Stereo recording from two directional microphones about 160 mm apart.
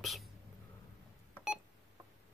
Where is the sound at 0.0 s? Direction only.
Centre (ahead or behind).